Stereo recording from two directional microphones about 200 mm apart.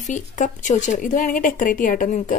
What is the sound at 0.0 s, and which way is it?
A woman's voice, 40° left (ahead or behind).